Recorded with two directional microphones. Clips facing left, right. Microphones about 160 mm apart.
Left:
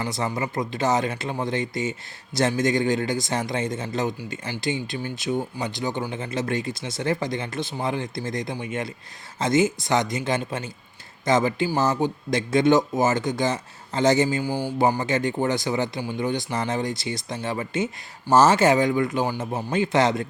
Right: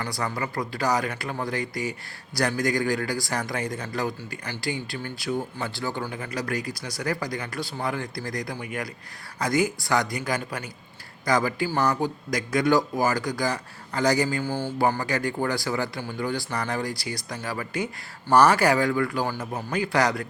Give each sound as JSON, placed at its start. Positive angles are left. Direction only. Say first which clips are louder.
{"t": 0.0, "sound": "speech", "louder": "left 3 dB", "side_deg": 20}